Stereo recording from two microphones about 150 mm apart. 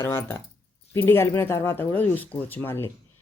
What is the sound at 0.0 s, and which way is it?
Speech, 15° left (ahead or behind).